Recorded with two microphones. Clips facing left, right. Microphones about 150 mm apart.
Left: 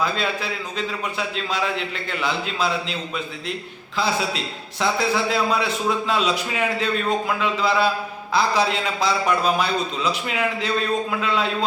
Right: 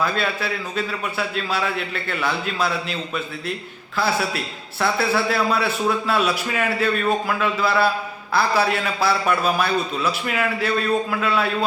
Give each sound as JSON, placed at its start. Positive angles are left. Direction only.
{"t": 0.0, "sound": "a man's voice", "side_deg": 15}
{"t": 3.9, "sound": "a man's voice", "side_deg": 20}